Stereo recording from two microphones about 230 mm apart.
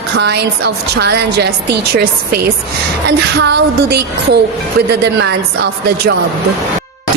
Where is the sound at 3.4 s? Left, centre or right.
Right.